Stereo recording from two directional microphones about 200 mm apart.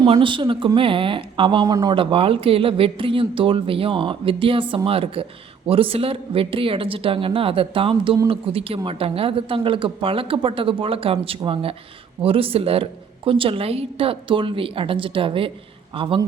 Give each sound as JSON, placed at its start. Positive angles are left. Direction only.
{"t": 0.0, "sound": "speech", "side_deg": -25}